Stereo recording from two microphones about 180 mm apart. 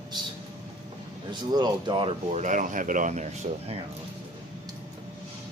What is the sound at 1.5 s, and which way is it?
Speech, 25° right (ahead or behind).